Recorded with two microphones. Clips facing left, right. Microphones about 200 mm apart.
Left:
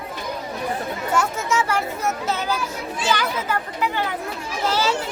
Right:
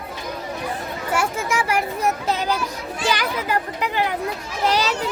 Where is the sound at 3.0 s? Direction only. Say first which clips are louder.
Even; 15° right (ahead or behind).